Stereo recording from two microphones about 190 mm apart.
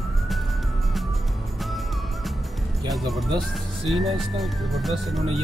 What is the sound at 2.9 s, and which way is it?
Speech, centre (ahead or behind).